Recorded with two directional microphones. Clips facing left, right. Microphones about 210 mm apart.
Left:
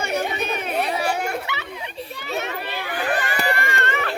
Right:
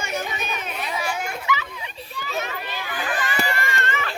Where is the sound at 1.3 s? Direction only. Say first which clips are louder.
Right 1 dB; 65° left (ahead or behind).